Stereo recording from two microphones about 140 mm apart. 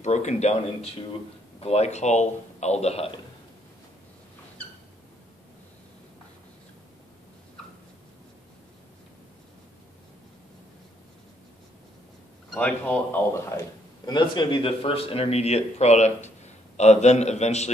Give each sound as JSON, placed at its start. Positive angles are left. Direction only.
{"t": 0.0, "sound": "speech", "side_deg": 55}
{"t": 12.4, "sound": "a man's voice", "side_deg": 10}